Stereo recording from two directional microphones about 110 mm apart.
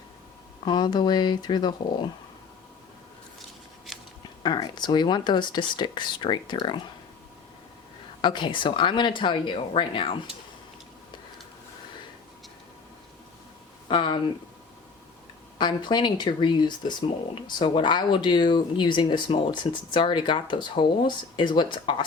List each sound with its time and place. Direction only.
0.6 s speech: 45° left (ahead or behind)
4.4 s speech: 45° left (ahead or behind)
8.2 s speech: 45° left (ahead or behind)
13.8 s speech: 50° left (ahead or behind)
15.5 s speech: 45° left (ahead or behind)